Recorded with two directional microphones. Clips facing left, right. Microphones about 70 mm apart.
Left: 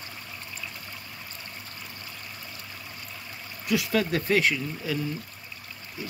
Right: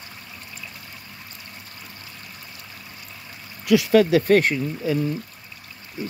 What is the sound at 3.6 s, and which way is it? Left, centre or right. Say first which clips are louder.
Speech: right 9 dB; right.